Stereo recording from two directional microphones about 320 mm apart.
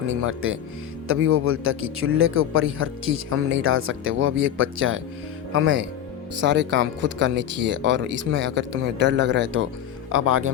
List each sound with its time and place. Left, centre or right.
0.1 s speech: right